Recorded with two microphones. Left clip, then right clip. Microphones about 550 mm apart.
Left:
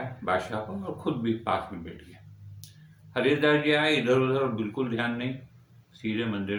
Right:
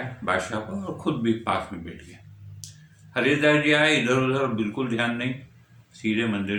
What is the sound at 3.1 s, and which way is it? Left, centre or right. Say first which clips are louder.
A man's voice: right 3 dB; left.